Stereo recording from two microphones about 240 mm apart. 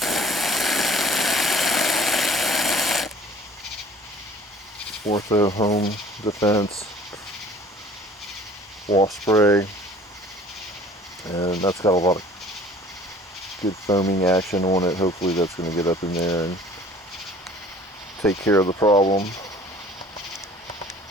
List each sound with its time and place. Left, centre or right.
0.0 s a sound: centre
5.1 s speech: centre
8.9 s speech: centre
11.3 s speech: centre
13.8 s speech: centre
18.2 s speech: centre